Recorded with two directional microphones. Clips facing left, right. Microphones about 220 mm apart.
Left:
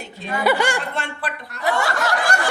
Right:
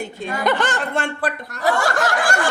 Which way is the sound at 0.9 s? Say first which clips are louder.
Right 6 dB; 45° right (ahead or behind).